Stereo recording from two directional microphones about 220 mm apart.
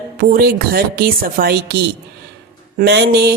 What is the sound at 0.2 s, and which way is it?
Speech, 45° right (ahead or behind).